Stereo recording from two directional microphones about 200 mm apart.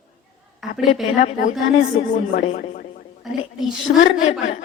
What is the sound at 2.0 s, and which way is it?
Speech, 40° left (ahead or behind).